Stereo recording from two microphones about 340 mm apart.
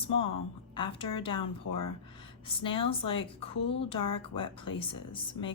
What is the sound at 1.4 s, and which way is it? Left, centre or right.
Speech, left.